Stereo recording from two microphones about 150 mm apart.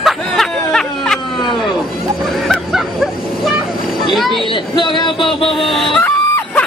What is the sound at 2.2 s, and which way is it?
Bow-wow, centre (ahead or behind).